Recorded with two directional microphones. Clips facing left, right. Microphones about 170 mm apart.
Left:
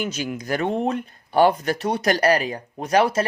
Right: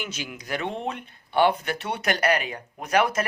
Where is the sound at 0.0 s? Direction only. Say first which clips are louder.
Left 8 dB; 40° left (ahead or behind).